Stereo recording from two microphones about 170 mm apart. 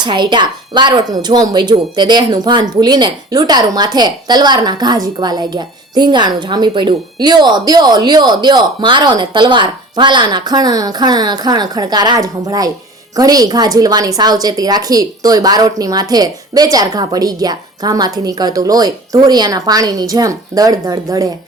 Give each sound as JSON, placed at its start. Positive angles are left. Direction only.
{"t": 0.0, "sound": "speech", "side_deg": -25}